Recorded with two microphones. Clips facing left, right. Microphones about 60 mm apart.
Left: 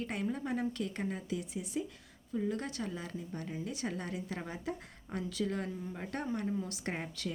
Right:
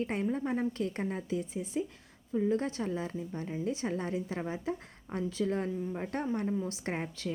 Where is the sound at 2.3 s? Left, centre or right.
Centre.